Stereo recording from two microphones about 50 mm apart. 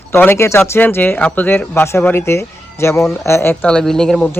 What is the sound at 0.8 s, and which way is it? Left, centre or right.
Speech, left.